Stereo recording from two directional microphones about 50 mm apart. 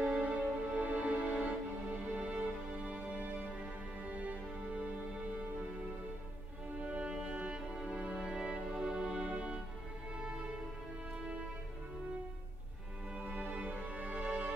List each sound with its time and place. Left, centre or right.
0.1 s music: right
6.8 s music: right
13.1 s music: right